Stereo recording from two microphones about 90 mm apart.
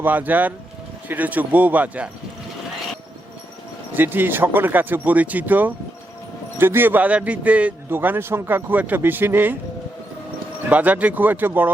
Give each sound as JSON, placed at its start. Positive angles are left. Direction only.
{"t": 0.0, "sound": "a man's voice", "side_deg": -20}
{"t": 3.9, "sound": "a man's voice", "side_deg": -20}
{"t": 10.7, "sound": "a man's voice", "side_deg": -15}